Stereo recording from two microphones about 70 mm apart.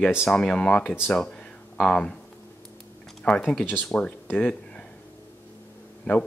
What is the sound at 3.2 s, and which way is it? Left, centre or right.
Speech, centre.